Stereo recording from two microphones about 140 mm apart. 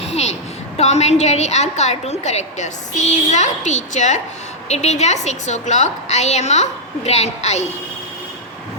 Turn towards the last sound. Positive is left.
turn(degrees=50)  # may be behind; listen again after turning